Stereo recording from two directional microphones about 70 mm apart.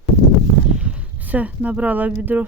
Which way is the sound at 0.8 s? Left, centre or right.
Centre.